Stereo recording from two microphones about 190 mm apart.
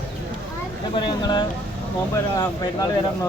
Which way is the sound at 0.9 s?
25° left (ahead or behind).